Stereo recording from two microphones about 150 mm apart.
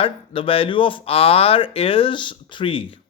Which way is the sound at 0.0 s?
40° left (ahead or behind).